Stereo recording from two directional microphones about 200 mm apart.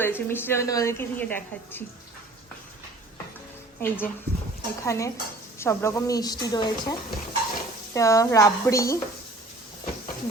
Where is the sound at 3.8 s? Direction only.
10° left (ahead or behind).